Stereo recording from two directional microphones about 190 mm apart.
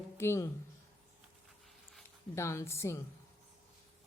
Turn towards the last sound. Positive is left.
turn(degrees=15)  # may be behind; listen again after turning